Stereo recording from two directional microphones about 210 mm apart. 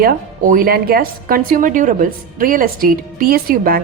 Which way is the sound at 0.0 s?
45° right (ahead or behind).